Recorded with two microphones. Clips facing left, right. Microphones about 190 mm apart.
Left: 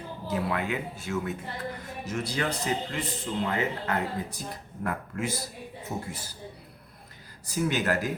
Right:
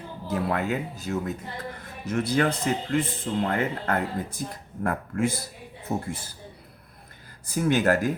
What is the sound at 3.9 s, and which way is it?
Speech, 50° right (ahead or behind).